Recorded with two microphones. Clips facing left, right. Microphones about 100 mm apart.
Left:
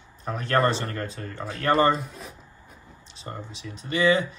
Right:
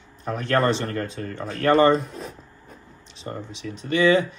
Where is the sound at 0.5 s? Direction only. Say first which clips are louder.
Right 1 dB; centre (ahead or behind).